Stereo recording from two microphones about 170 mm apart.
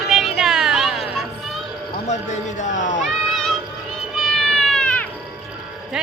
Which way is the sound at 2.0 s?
45° left (ahead or behind).